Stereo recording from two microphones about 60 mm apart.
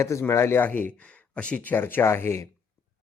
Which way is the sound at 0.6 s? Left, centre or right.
Left.